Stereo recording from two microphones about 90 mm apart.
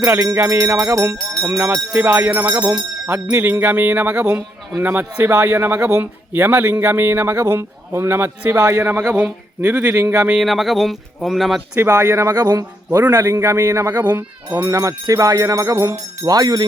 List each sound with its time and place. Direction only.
0.0 s a man's voice: 25° right (ahead or behind)
8.5 s jingle bell: 35° right (ahead or behind)
8.8 s a man's voice: 20° right (ahead or behind)
10.3 s speech: centre (ahead or behind)
11.7 s jingle bell: 30° right (ahead or behind)
12.3 s speech: 50° right (ahead or behind)
13.1 s jingle bell: 35° right (ahead or behind)
13.9 s a man's voice: 20° right (ahead or behind)
14.5 s jingle bell: 35° right (ahead or behind)